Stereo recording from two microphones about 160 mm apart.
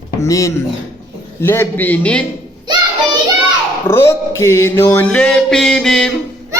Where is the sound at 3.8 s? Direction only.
15° left (ahead or behind).